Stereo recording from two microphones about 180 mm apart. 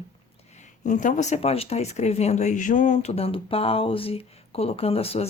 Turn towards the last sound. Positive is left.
turn(degrees=35)  # may be behind; listen again after turning